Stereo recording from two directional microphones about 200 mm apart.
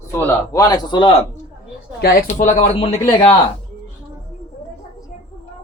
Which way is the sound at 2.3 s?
35° left (ahead or behind).